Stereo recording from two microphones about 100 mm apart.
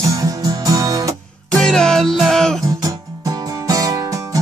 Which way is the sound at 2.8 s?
35° right (ahead or behind).